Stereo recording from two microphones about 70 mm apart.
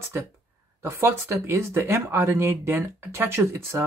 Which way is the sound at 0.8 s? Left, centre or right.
Right.